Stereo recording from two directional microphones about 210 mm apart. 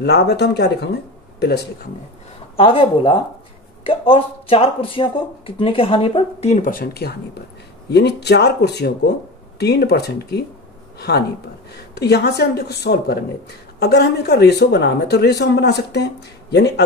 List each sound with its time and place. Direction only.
0.0 s speech: 50° left (ahead or behind)
2.5 s speech: 25° left (ahead or behind); by 16.8 s 50° left (ahead or behind)